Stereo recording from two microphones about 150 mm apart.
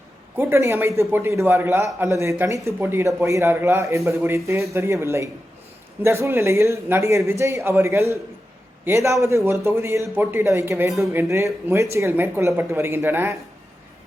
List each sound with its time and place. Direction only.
0.3 s a man's voice: 15° right (ahead or behind)